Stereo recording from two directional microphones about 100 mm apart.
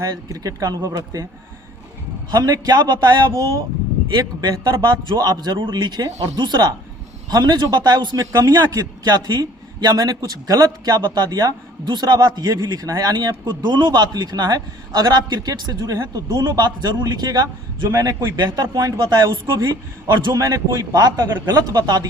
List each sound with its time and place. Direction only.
0.0 s speech: 35° right (ahead or behind)
2.3 s a man's voice: 40° right (ahead or behind)